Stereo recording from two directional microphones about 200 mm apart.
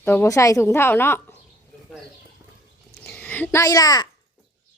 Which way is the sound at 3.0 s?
5° left (ahead or behind).